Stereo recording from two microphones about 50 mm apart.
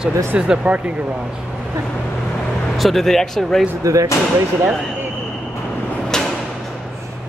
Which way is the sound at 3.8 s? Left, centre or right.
Right.